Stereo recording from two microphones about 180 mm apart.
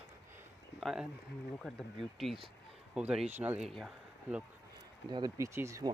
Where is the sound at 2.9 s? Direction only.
5° right (ahead or behind).